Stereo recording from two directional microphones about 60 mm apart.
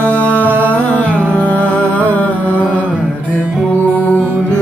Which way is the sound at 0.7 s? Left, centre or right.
Left.